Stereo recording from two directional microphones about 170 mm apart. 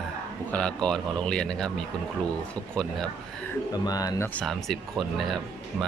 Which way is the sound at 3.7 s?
20° left (ahead or behind).